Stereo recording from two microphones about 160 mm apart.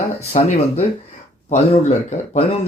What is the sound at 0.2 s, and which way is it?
Speech, 45° left (ahead or behind).